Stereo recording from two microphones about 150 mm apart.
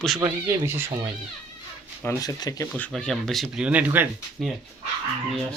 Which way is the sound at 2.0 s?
20° left (ahead or behind).